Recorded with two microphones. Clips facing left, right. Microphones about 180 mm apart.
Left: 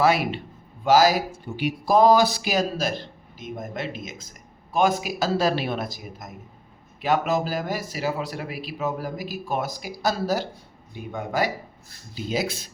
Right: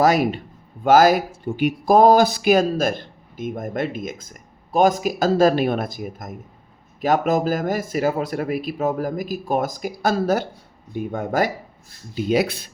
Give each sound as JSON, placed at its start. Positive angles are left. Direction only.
{"t": 0.0, "sound": "speech", "side_deg": -45}
{"t": 12.1, "sound": "speech", "side_deg": -60}